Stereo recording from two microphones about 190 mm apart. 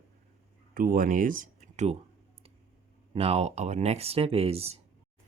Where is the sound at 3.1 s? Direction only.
35° right (ahead or behind).